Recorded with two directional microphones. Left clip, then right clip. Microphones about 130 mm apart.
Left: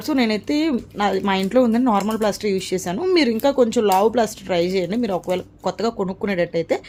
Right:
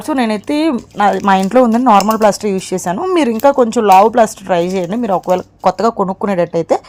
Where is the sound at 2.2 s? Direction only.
50° right (ahead or behind).